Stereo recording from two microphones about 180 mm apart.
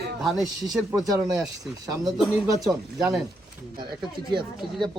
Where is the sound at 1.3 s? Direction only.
20° right (ahead or behind).